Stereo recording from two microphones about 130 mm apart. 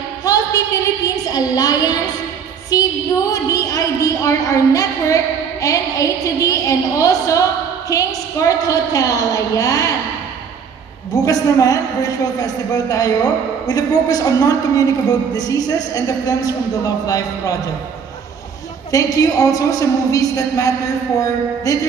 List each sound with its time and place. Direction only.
0.2 s a sound: 25° left (ahead or behind)
7.9 s a man's voice: 25° left (ahead or behind)
11.1 s a man's voice: 25° left (ahead or behind)
18.9 s a man's voice: 25° left (ahead or behind)